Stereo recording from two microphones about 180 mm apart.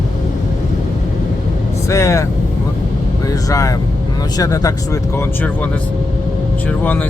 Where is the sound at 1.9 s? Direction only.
15° left (ahead or behind).